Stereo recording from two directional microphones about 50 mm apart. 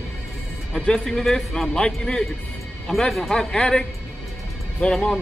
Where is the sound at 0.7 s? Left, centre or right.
Centre.